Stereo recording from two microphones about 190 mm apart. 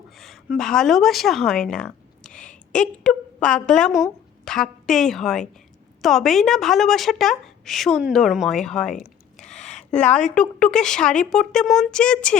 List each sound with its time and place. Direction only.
0.2 s a woman's voice: centre (ahead or behind)